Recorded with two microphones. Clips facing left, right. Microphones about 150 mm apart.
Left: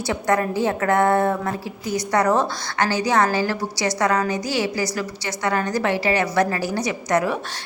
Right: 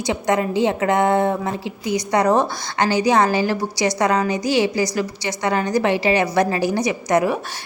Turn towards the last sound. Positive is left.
turn(degrees=-15)  # may be behind; listen again after turning